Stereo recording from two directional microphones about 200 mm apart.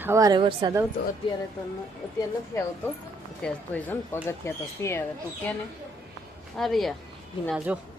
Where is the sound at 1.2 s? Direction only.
25° left (ahead or behind).